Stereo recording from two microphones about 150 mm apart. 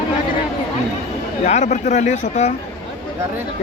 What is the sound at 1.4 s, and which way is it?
Speech, 50° left (ahead or behind).